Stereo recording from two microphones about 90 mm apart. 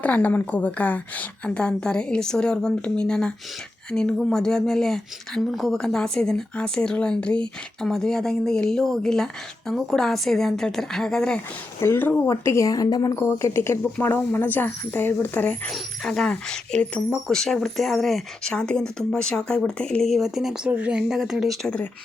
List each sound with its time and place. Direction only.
0.0 s speech: 20° left (ahead or behind)
11.8 s speech: 25° left (ahead or behind)
12.3 s speech: 35° left (ahead or behind)
13.1 s speech: 30° left (ahead or behind)
15.7 s speech: 5° left (ahead or behind)
18.5 s speech: 10° left (ahead or behind)
20.7 s a woman's voice: 15° right (ahead or behind)